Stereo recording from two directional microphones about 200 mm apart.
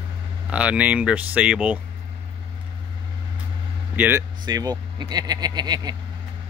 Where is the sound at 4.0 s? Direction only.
10° right (ahead or behind).